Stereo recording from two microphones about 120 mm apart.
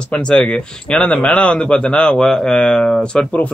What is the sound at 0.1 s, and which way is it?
Speech, 10° left (ahead or behind).